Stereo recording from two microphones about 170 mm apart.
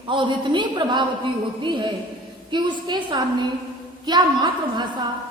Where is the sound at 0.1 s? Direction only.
30° right (ahead or behind).